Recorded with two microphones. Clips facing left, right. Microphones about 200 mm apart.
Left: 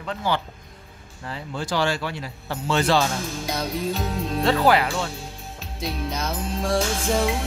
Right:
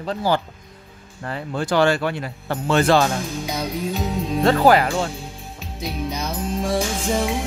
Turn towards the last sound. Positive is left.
turn(degrees=0)  # may be behind; listen again after turning